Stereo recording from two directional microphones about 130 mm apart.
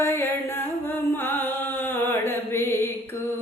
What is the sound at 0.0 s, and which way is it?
Music, 20° left (ahead or behind).